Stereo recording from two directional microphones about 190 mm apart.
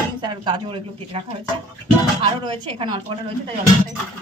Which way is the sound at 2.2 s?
30° right (ahead or behind).